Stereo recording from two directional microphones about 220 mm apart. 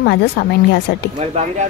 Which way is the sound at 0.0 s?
50° left (ahead or behind).